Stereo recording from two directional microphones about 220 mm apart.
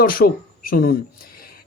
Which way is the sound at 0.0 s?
40° left (ahead or behind).